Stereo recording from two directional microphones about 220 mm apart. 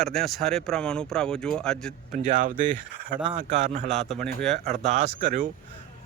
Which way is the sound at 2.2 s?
35° right (ahead or behind).